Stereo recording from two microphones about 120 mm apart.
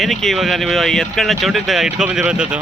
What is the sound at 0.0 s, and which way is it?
Speech, centre (ahead or behind).